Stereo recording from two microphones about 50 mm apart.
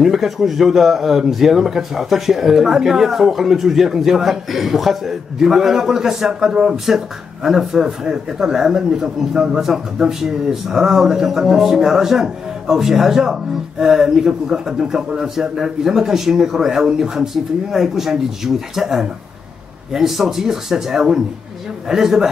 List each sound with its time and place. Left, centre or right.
0.0 s a man's voice: centre